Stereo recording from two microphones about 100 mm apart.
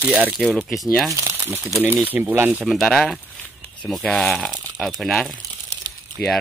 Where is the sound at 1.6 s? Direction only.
Centre (ahead or behind).